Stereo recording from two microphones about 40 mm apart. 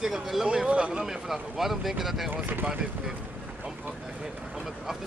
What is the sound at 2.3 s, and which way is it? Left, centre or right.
Speech, right.